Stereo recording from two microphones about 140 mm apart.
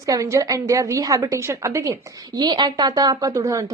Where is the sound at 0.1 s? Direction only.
25° right (ahead or behind).